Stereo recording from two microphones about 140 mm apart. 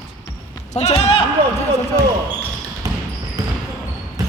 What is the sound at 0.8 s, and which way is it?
Speech, 50° left (ahead or behind).